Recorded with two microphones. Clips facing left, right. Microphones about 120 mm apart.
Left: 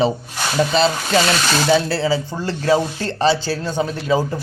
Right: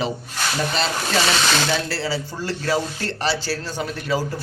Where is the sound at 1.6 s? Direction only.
15° left (ahead or behind).